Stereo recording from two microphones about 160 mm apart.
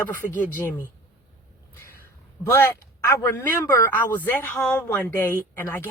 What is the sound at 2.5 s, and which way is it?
Speech, 15° left (ahead or behind).